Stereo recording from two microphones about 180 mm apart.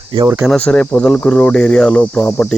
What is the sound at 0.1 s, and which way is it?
Speech, 20° right (ahead or behind).